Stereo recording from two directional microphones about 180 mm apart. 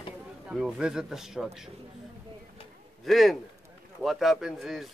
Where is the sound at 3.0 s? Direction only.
Centre (ahead or behind).